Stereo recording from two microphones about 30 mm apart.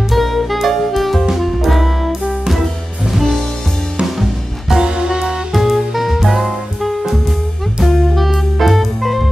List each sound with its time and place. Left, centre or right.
0.1 s music: centre
4.0 s music: centre
4.8 s music: right
5.5 s music: centre
8.5 s music: centre